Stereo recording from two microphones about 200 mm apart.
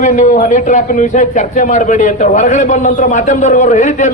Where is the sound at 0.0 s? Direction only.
40° left (ahead or behind).